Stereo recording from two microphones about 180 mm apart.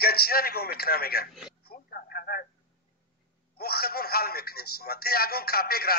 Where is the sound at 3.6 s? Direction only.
55° left (ahead or behind).